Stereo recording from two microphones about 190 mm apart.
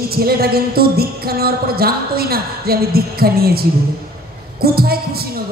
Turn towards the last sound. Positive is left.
turn(degrees=-55)  # may be behind; listen again after turning